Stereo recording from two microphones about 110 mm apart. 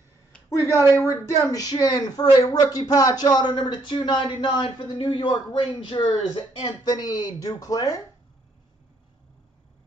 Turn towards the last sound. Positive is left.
turn(degrees=30)  # may be behind; listen again after turning